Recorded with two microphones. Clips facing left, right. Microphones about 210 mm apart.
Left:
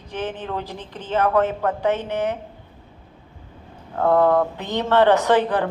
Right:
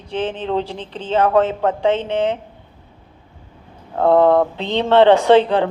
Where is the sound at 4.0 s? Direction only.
30° right (ahead or behind).